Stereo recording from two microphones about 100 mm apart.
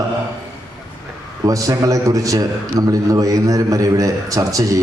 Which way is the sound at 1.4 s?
35° right (ahead or behind).